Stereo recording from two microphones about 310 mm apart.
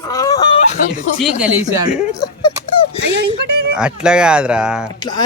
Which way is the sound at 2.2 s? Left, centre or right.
Centre.